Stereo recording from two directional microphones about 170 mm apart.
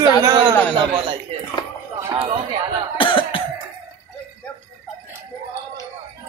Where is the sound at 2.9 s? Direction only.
30° left (ahead or behind).